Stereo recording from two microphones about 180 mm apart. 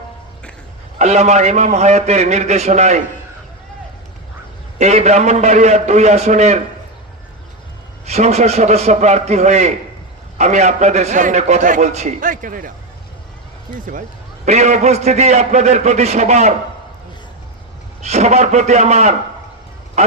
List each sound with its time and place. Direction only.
0.9 s a man's voice: 35° right (ahead or behind)
4.8 s a man's voice: 40° right (ahead or behind)
8.0 s a man's voice: 35° right (ahead or behind)
13.7 s a man's voice: 50° right (ahead or behind)
18.0 s a man's voice: 40° right (ahead or behind)